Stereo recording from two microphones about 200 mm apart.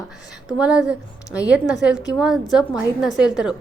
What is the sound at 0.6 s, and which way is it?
A woman's voice, 5° right (ahead or behind).